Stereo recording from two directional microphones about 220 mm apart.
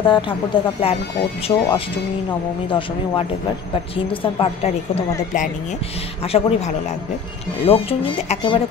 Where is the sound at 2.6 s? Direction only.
25° left (ahead or behind).